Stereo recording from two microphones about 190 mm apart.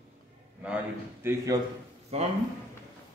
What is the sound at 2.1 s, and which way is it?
Speech, 35° right (ahead or behind).